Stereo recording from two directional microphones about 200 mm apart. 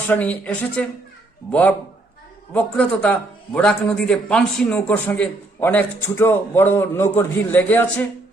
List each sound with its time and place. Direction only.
0.1 s a man's voice: 5° left (ahead or behind)